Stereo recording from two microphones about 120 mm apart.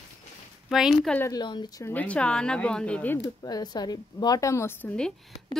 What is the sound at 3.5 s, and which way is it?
A woman's voice, 35° left (ahead or behind).